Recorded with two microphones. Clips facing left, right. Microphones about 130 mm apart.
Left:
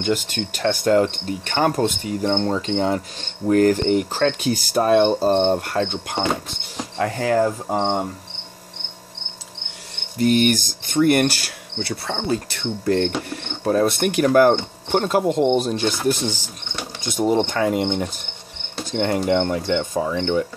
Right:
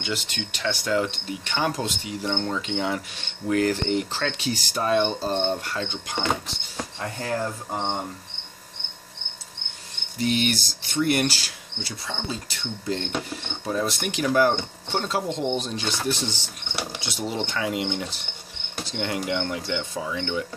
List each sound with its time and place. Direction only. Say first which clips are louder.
0.0 s cricket: left 8 dB; 45° left (ahead or behind)
2.3 s cricket: left 4 dB; 35° left (ahead or behind); by 6.1 s 55° left (ahead or behind)
7.0 s speech: left 10 dB; 90° left
10.1 s speech: left 7 dB; 50° left (ahead or behind)
16.1 s cricket: left 6 dB; 45° left (ahead or behind)
18.9 s speech: left 8 dB; 45° left (ahead or behind)